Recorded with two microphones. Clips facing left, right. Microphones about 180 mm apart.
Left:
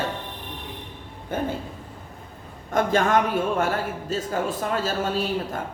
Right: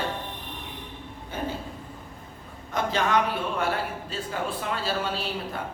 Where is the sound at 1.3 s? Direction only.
55° left (ahead or behind).